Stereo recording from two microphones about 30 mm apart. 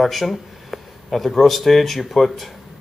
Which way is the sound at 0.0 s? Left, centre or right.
Centre.